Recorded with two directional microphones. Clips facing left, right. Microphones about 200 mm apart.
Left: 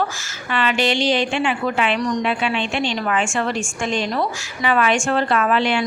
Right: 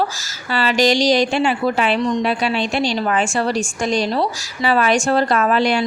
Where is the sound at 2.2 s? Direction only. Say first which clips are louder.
Right 2 dB; 35° right (ahead or behind).